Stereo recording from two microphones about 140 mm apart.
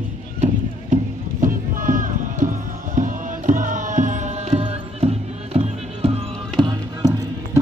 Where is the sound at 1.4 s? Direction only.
75° right (ahead or behind); by 6.2 s 45° right (ahead or behind).